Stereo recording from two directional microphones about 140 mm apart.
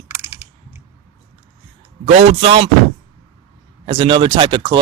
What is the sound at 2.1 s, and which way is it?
Speech, 45° right (ahead or behind).